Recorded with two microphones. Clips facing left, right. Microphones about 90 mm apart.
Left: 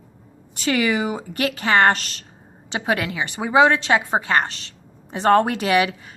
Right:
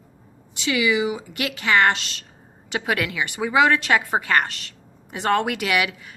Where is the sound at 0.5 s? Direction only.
45° left (ahead or behind).